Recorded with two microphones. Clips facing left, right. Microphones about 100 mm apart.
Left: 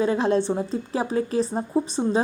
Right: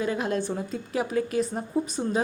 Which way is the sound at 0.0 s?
30° left (ahead or behind).